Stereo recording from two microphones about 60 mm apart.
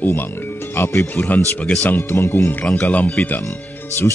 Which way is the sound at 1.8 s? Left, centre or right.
Left.